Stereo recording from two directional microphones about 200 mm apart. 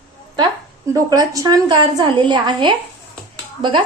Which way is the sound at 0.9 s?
15° right (ahead or behind).